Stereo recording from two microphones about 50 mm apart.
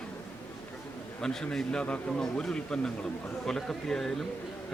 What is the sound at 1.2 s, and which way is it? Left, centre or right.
Speech, centre.